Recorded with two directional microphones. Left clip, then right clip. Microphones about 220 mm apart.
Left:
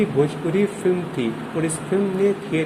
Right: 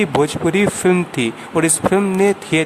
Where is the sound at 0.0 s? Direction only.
35° right (ahead or behind).